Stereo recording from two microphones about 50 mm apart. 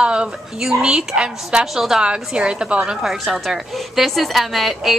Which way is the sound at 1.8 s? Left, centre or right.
Centre.